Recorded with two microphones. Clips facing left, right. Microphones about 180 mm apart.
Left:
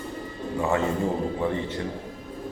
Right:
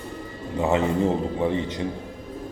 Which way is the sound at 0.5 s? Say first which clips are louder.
Right 3 dB; 20° right (ahead or behind).